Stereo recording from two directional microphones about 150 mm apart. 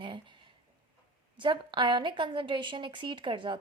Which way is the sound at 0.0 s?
35° right (ahead or behind).